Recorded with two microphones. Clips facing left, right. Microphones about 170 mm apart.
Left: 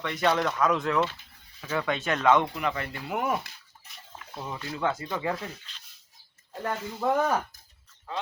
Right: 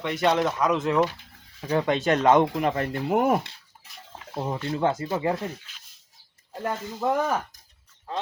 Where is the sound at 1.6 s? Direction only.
35° right (ahead or behind).